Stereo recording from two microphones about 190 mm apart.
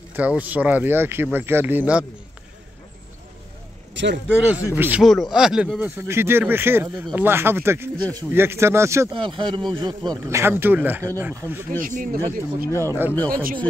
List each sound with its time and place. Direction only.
0.1 s speech: 10° right (ahead or behind)
3.9 s a sound: 70° right (ahead or behind)
4.7 s speech: 10° right (ahead or behind)
9.1 s speech: 25° right (ahead or behind)
11.8 s speech: 45° right (ahead or behind)
12.8 s speech: 10° right (ahead or behind)
13.3 s speech: 50° right (ahead or behind)